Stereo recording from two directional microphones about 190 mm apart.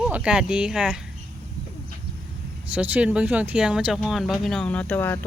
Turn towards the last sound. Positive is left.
turn(degrees=10)  # may be behind; listen again after turning